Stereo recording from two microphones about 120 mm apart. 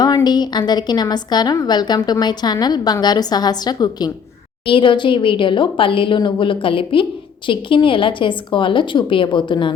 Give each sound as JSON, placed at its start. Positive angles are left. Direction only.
{"t": 0.0, "sound": "a woman's voice", "side_deg": 35}
{"t": 4.6, "sound": "speech", "side_deg": 45}